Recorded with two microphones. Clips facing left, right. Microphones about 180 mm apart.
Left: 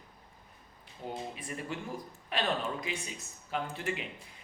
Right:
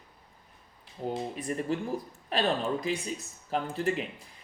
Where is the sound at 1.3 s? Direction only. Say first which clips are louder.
Right 8 dB; 40° right (ahead or behind).